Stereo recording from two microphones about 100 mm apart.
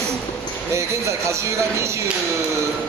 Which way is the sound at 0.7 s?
30° right (ahead or behind).